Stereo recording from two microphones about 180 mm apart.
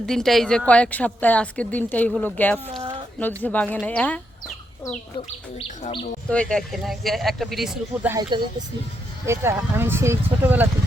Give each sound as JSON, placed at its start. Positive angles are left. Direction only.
{"t": 0.0, "sound": "a woman's voice", "side_deg": 5}
{"t": 5.5, "sound": "music", "side_deg": 30}
{"t": 6.2, "sound": "speech", "side_deg": 5}
{"t": 8.1, "sound": "speech", "side_deg": -25}